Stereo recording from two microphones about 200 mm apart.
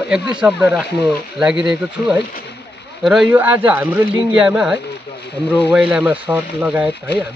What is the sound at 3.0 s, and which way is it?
Speech, 5° right (ahead or behind).